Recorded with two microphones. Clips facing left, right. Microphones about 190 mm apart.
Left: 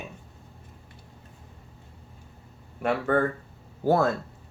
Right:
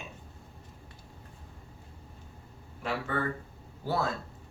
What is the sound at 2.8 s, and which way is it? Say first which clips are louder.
Speech: left 8 dB; 55° left (ahead or behind).